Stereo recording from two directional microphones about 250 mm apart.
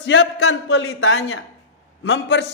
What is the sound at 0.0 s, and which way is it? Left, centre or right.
A man's voice, left.